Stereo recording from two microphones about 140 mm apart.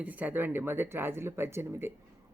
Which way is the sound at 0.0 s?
10° right (ahead or behind).